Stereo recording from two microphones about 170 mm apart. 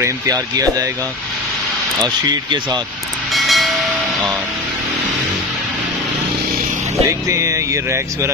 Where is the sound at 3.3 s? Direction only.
Centre (ahead or behind).